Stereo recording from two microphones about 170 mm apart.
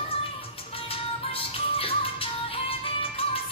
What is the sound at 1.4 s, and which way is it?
Music, 35° left (ahead or behind).